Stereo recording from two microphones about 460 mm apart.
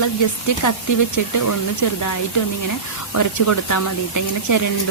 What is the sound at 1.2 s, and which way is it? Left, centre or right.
Speech, left.